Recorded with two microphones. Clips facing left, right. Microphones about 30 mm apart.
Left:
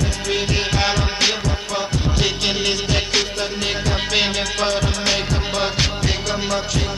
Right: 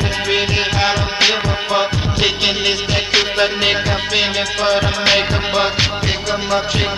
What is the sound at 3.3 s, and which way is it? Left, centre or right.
Music, right.